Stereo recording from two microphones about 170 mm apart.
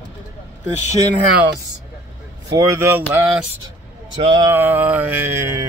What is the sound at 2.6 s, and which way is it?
Mantra, 15° right (ahead or behind).